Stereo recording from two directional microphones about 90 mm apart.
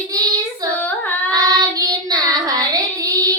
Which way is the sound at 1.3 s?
40° right (ahead or behind).